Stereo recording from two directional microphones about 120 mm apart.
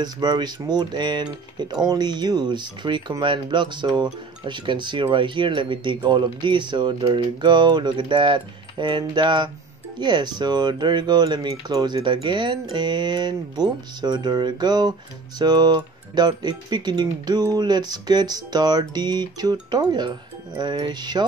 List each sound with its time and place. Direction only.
0.0 s speech: 35° right (ahead or behind)